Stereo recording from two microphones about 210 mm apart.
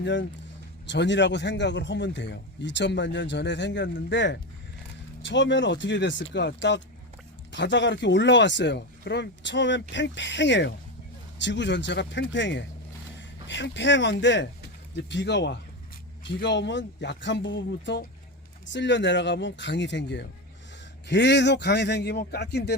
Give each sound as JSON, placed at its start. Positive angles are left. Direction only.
{"t": 0.0, "sound": "a man's voice", "side_deg": 60}